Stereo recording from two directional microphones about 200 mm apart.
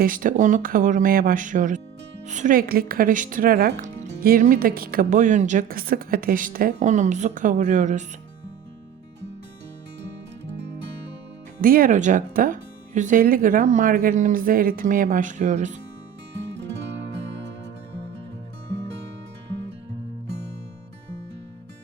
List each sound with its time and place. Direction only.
0.0 s speech: 45° right (ahead or behind)
11.6 s speech: 45° right (ahead or behind)